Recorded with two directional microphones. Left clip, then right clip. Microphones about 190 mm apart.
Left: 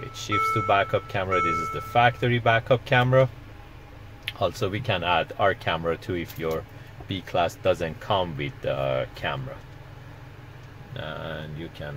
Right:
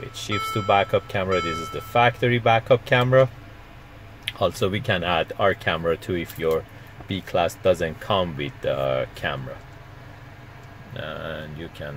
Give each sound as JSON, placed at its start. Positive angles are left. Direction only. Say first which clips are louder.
{"t": 0.1, "sound": "speech", "louder": "left 3 dB", "side_deg": -20}
{"t": 4.3, "sound": "speech", "louder": "right 3 dB", "side_deg": -25}
{"t": 10.9, "sound": "speech", "louder": "right 2 dB", "side_deg": -15}